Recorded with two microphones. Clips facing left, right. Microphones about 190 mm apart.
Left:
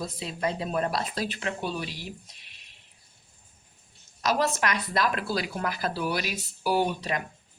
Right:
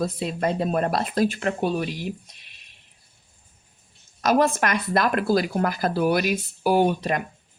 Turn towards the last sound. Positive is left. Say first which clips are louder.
# right 6 dB
turn(degrees=-50)  # may be behind; listen again after turning